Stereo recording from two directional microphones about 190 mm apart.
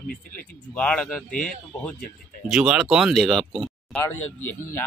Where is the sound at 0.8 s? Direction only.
5° left (ahead or behind).